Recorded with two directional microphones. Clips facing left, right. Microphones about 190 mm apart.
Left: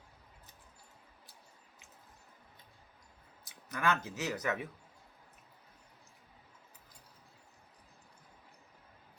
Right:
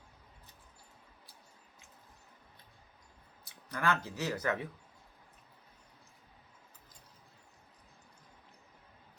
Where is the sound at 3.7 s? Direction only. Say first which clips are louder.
Even; 20° left (ahead or behind).